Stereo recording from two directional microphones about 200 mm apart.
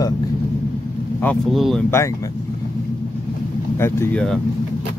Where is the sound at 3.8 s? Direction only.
10° left (ahead or behind).